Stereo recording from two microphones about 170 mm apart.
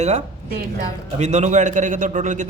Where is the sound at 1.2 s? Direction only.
45° right (ahead or behind).